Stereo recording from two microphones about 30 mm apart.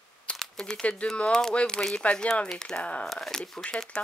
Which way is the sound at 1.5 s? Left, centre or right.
Left.